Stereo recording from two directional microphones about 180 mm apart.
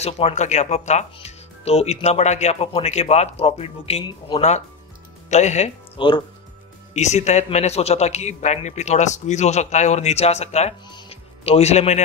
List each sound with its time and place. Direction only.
0.0 s speech: 35° left (ahead or behind)
6.9 s speech: 40° left (ahead or behind)
10.9 s music: 30° left (ahead or behind)